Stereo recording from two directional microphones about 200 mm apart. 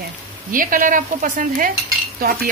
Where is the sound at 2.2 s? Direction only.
50° right (ahead or behind).